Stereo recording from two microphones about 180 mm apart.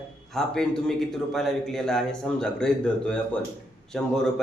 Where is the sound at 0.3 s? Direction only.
5° left (ahead or behind).